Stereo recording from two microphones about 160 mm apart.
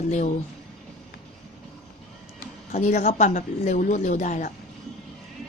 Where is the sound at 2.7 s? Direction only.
45° left (ahead or behind).